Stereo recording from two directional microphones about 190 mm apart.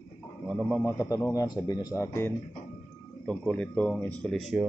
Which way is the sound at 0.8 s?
15° left (ahead or behind).